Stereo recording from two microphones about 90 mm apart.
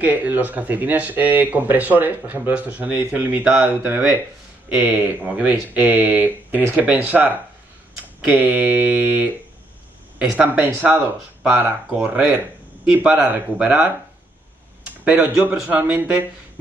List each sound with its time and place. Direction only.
0.0 s speech: 20° right (ahead or behind)
10.3 s speech: 15° right (ahead or behind)